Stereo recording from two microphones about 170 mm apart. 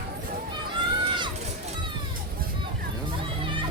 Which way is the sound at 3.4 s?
30° right (ahead or behind).